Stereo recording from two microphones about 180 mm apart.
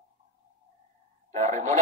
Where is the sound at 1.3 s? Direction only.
40° right (ahead or behind).